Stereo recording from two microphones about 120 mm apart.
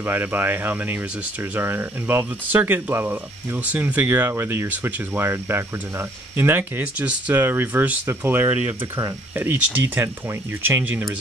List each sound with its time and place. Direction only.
0.0 s speech: 15° right (ahead or behind)